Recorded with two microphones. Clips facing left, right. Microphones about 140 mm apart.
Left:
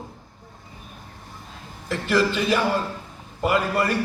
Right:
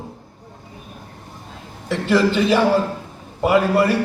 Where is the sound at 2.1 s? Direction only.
25° right (ahead or behind).